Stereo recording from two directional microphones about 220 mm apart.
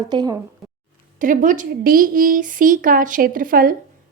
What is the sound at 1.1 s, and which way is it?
A woman's voice, 35° right (ahead or behind).